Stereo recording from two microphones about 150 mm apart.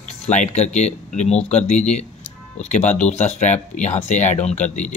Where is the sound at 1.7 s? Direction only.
50° left (ahead or behind).